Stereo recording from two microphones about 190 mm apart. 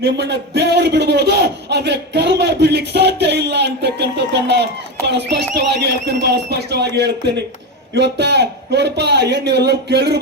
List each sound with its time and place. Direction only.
0.0 s a man's voice: 60° right (ahead or behind)